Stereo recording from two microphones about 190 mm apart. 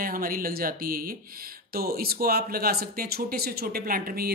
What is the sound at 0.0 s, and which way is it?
Speech, 50° right (ahead or behind).